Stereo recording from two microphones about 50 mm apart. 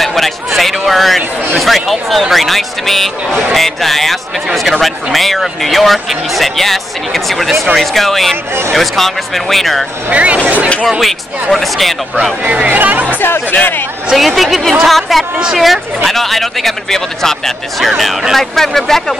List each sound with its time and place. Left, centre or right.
0.0 s a sound: centre
1.6 s speech: centre
10.0 s speech: right
10.9 s speech: centre
12.4 s speech: right
13.2 s speech: left
14.1 s speech: centre